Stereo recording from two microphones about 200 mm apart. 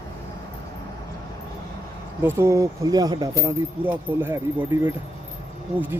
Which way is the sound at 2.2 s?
10° right (ahead or behind).